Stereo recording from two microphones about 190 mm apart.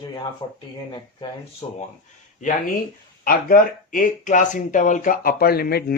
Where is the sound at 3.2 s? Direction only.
45° left (ahead or behind).